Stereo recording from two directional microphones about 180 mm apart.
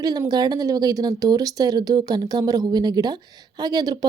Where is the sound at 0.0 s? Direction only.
20° right (ahead or behind).